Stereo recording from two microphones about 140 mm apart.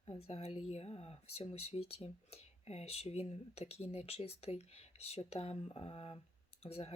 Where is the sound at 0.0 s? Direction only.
45° left (ahead or behind).